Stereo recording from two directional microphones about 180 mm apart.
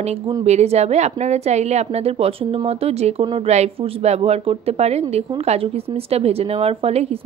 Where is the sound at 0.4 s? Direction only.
35° right (ahead or behind).